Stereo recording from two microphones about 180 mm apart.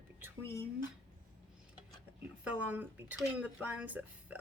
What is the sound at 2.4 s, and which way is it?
Speech, 10° right (ahead or behind).